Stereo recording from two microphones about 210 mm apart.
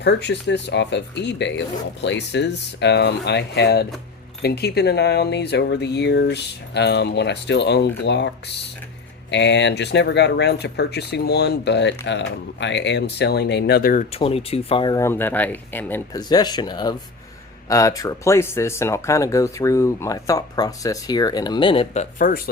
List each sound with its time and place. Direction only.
0.0 s speech: 55° left (ahead or behind)
9.3 s speech: 55° left (ahead or behind)
14.1 s speech: 25° left (ahead or behind)
22.2 s speech: 40° left (ahead or behind)